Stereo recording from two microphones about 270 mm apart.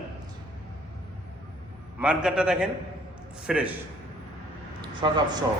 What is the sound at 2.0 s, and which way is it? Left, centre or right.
A man's voice, centre.